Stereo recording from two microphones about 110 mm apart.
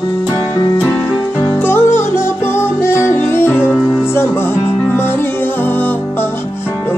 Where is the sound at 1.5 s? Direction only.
20° left (ahead or behind).